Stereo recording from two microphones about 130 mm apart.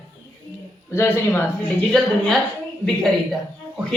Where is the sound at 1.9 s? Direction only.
5° left (ahead or behind).